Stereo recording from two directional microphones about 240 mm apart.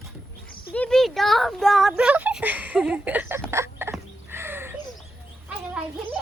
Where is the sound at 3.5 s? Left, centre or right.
Centre.